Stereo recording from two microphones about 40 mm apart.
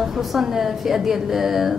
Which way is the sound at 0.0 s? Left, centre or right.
Centre.